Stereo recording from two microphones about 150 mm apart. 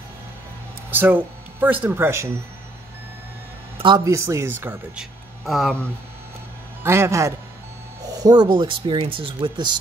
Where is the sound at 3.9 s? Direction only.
20° right (ahead or behind).